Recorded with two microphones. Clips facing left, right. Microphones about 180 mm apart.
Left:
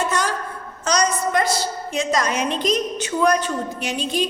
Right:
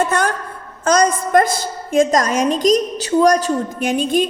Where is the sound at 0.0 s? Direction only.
55° right (ahead or behind).